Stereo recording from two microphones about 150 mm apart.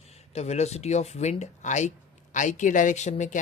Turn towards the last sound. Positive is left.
turn(degrees=50)  # may be behind; listen again after turning